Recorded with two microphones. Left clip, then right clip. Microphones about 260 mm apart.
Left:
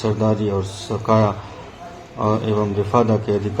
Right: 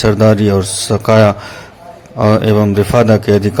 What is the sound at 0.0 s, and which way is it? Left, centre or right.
A man's voice, right.